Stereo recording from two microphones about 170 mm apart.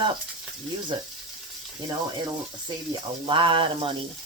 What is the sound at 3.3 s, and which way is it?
Speech, 30° right (ahead or behind).